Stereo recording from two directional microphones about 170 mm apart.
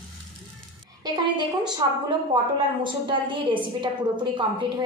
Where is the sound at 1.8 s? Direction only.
30° right (ahead or behind).